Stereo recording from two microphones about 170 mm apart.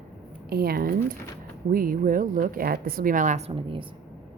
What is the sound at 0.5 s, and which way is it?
A woman's voice, 65° right (ahead or behind).